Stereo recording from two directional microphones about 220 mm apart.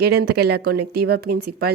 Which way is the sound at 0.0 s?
45° right (ahead or behind).